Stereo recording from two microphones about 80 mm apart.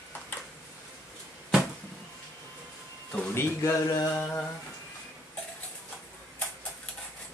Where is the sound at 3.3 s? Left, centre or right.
Left.